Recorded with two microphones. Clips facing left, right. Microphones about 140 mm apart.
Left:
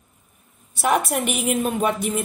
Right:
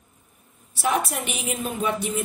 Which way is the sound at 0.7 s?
55° left (ahead or behind).